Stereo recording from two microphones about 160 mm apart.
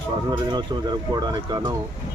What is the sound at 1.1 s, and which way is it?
Speech, 25° right (ahead or behind).